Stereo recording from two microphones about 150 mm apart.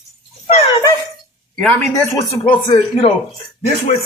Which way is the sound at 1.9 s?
20° left (ahead or behind).